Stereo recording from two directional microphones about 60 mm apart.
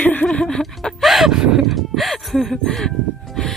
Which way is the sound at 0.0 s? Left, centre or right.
Left.